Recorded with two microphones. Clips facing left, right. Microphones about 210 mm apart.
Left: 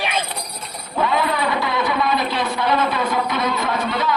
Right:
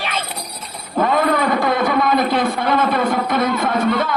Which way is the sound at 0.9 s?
50° right (ahead or behind).